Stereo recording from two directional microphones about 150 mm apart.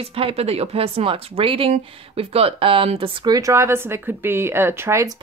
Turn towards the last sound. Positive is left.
turn(degrees=-20)  # may be behind; listen again after turning